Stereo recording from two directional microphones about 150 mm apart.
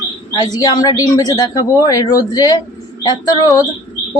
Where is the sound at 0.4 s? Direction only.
25° left (ahead or behind).